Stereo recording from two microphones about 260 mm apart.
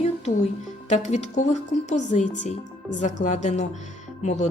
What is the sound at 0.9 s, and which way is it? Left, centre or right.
A woman's voice, left.